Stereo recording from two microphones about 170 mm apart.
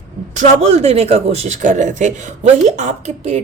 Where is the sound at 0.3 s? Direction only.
40° right (ahead or behind).